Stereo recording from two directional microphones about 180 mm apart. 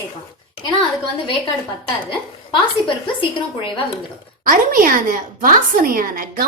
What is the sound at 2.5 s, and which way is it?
Speech, 25° left (ahead or behind).